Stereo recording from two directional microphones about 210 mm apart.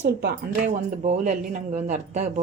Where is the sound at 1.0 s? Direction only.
30° right (ahead or behind).